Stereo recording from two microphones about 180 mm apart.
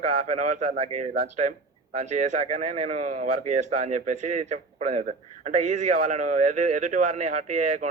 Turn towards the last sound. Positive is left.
turn(degrees=-45)  # may be behind; listen again after turning